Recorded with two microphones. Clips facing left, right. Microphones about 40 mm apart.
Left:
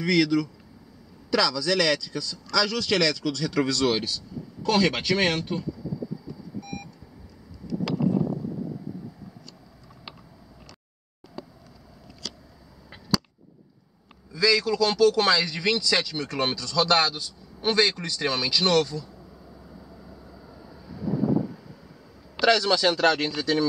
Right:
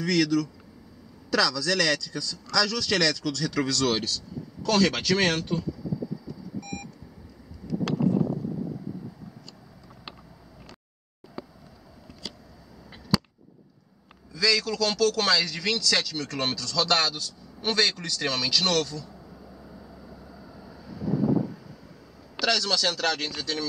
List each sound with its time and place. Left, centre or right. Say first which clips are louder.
0.0 s a man's voice: left 2 dB; centre
6.6 s beep: left 1 dB; centre
14.3 s a man's voice: left 3 dB; centre
19.3 s vehicle: right 1 dB; centre
22.4 s a man's voice: left 5 dB; centre